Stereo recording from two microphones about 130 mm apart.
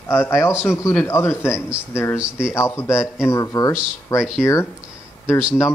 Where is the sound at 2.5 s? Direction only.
20° left (ahead or behind).